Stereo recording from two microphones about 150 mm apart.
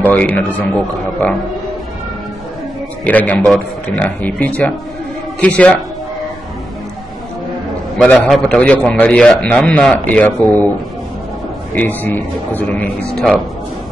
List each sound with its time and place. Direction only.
0.0 s a man's voice: 10° left (ahead or behind)
3.1 s a man's voice: 10° left (ahead or behind)
8.0 s a man's voice: 5° left (ahead or behind)
11.7 s a man's voice: 10° left (ahead or behind)